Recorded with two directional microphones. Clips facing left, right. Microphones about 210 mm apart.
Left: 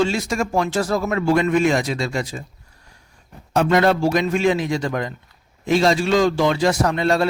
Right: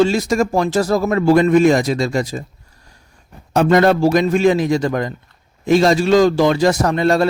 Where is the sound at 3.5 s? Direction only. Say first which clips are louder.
Right 4 dB; 40° right (ahead or behind).